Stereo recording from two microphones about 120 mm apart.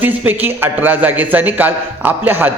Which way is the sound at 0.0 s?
15° right (ahead or behind).